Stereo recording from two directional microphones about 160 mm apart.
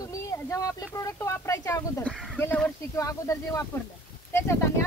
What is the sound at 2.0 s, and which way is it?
Speech, centre (ahead or behind).